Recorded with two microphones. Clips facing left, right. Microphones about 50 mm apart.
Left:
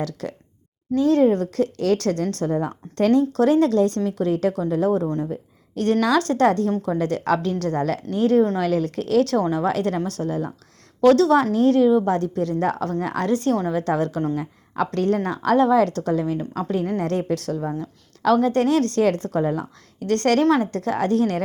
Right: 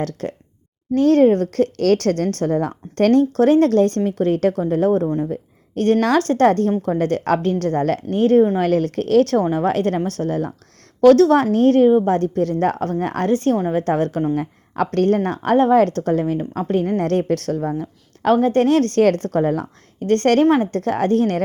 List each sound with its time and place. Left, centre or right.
0.0 s a woman's voice: right
3.3 s a woman's voice: right
5.0 s speech: centre
5.3 s a woman's voice: right
20.0 s a woman's voice: right